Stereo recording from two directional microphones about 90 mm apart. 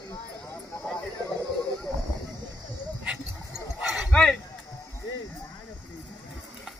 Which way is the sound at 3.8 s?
10° right (ahead or behind).